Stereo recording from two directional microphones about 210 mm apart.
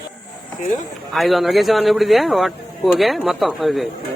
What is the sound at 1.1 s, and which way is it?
Speech, centre (ahead or behind).